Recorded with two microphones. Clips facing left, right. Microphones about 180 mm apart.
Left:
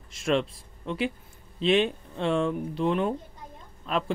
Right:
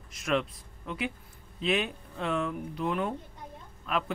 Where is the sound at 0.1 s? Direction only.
25° left (ahead or behind).